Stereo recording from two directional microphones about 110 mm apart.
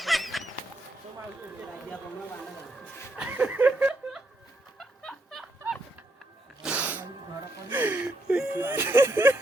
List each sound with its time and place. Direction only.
0.0 s goose: centre (ahead or behind)
3.2 s laughter: 15° right (ahead or behind)
4.8 s music: centre (ahead or behind)
6.6 s sneeze: 10° right (ahead or behind)
7.7 s a sound: 15° right (ahead or behind)
8.6 s a sound: 20° right (ahead or behind)